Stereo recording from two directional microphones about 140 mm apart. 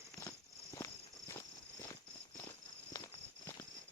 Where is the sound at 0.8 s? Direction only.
25° left (ahead or behind).